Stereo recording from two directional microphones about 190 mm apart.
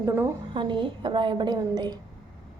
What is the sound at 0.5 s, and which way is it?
A woman's voice, 25° right (ahead or behind).